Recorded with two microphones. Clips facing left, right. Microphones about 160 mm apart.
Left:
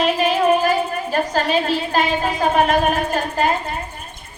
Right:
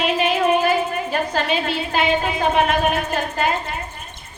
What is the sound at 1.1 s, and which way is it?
A woman's voice, 40° left (ahead or behind).